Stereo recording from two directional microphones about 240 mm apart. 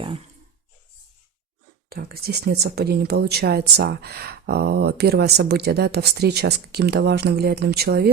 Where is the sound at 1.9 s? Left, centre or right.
Right.